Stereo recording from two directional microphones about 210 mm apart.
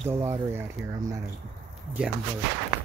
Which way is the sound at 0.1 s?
10° right (ahead or behind).